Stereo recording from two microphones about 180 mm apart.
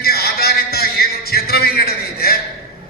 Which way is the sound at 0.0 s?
60° left (ahead or behind).